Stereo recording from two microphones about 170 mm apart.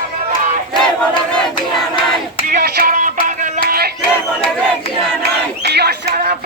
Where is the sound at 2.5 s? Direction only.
65° right (ahead or behind).